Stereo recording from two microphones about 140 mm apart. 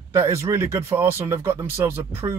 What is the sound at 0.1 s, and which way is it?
A man's voice, 20° right (ahead or behind).